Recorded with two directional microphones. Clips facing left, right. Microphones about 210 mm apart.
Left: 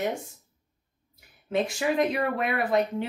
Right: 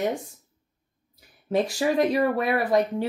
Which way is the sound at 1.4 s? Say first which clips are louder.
Right 3 dB; 35° right (ahead or behind).